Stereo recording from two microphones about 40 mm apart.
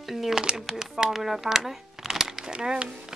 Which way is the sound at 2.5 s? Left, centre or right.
Right.